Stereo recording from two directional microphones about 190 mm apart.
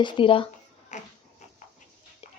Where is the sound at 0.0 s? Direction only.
25° left (ahead or behind).